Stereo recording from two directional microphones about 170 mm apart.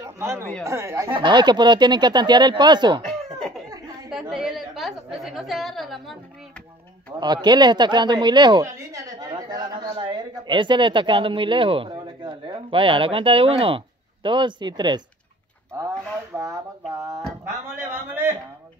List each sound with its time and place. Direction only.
0.0 s speech: 15° right (ahead or behind)
1.1 s speech: 25° right (ahead or behind)
4.1 s a woman's voice: 5° right (ahead or behind)
7.4 s a woman's voice: 25° right (ahead or behind)
16.3 s a sound: 15° right (ahead or behind)